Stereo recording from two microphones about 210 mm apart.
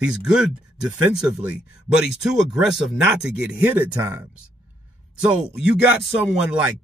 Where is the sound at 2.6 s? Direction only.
Centre (ahead or behind).